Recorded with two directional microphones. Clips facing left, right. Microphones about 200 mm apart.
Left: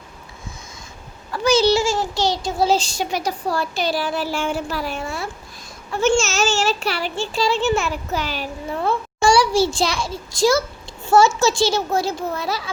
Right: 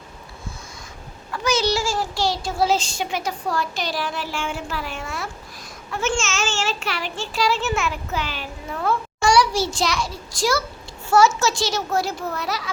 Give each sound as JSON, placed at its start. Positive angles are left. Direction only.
{"t": 1.3, "sound": "speech", "side_deg": 30}